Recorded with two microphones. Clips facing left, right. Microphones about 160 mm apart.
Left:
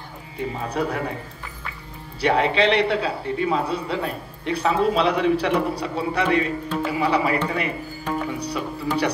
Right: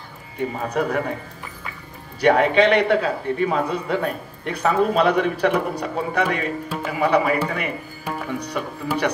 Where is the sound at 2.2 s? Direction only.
50° right (ahead or behind).